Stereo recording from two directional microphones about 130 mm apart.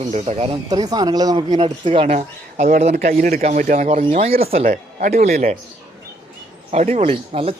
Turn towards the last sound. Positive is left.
turn(degrees=-45)  # may be behind; listen again after turning